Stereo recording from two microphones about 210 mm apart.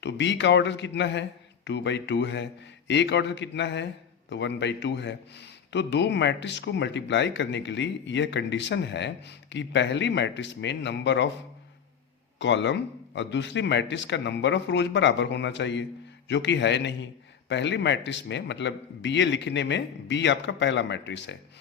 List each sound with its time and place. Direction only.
0.0 s a man's voice: 55° left (ahead or behind)
12.4 s a man's voice: 60° left (ahead or behind)